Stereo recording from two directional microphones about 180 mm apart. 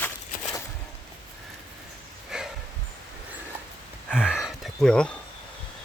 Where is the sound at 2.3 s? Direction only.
5° right (ahead or behind).